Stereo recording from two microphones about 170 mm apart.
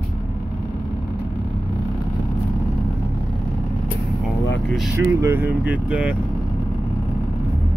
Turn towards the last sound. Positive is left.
turn(degrees=-5)  # may be behind; listen again after turning